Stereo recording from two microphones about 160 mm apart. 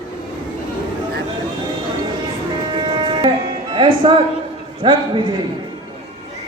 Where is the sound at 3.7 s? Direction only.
30° right (ahead or behind).